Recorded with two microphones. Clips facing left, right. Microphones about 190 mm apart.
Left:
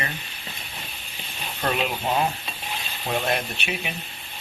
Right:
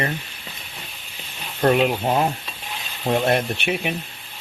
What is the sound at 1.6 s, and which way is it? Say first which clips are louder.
Speech: right 8 dB; 50° right (ahead or behind).